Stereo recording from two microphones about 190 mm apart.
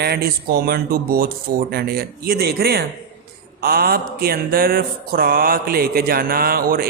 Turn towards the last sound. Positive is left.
turn(degrees=-50)  # may be behind; listen again after turning